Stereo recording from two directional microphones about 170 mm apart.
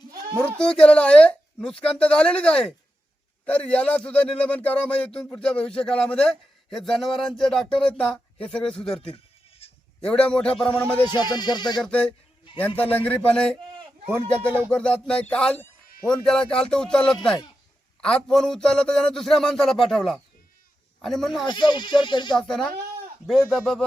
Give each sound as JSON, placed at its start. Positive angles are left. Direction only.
{"t": 0.6, "sound": "speech", "side_deg": 5}
{"t": 9.6, "sound": "bleat", "side_deg": 35}
{"t": 10.0, "sound": "a man's voice", "side_deg": 5}
{"t": 11.0, "sound": "speech", "side_deg": 25}
{"t": 11.8, "sound": "a man's voice", "side_deg": 5}
{"t": 14.4, "sound": "a sound", "side_deg": -15}
{"t": 14.7, "sound": "speech", "side_deg": 5}
{"t": 21.4, "sound": "speech", "side_deg": 25}
{"t": 22.4, "sound": "speech", "side_deg": 0}